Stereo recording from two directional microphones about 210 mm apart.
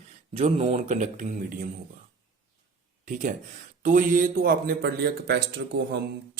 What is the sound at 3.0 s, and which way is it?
A man's voice, 40° right (ahead or behind).